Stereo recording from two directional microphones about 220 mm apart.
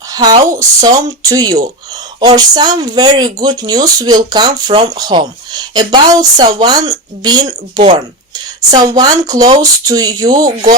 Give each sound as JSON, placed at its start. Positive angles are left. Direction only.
{"t": 0.1, "sound": "speech", "side_deg": -20}